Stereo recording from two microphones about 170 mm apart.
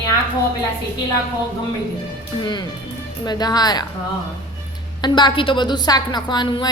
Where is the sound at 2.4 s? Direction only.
25° left (ahead or behind).